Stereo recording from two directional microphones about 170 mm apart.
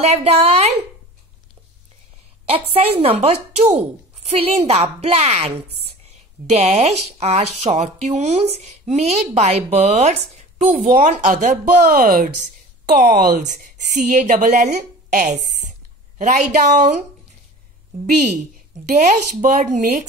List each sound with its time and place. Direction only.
0.0 s a woman's voice: 40° right (ahead or behind)
2.5 s a woman's voice: 35° right (ahead or behind)
18.9 s a woman's voice: 45° right (ahead or behind)